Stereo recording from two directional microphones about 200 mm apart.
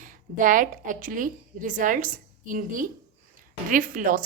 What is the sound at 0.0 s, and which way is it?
A woman's voice, 40° right (ahead or behind).